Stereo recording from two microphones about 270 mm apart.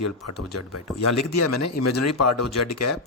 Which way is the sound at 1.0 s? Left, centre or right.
Left.